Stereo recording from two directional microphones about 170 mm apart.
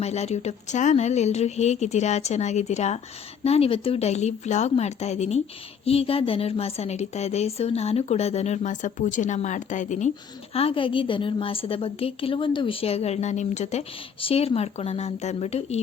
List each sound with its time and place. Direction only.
0.0 s a woman's voice: 40° left (ahead or behind)
10.5 s a woman's voice: 35° left (ahead or behind)